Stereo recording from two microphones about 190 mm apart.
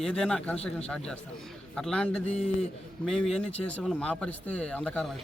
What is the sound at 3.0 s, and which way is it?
Speech, centre (ahead or behind).